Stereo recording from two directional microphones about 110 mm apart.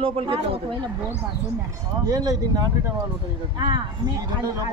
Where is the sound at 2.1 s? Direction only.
35° right (ahead or behind).